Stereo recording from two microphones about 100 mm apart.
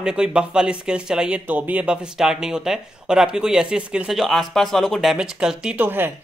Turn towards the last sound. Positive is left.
turn(degrees=-20)  # may be behind; listen again after turning